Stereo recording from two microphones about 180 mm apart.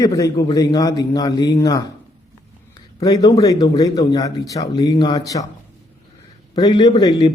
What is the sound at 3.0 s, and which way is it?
A man's voice, 20° left (ahead or behind).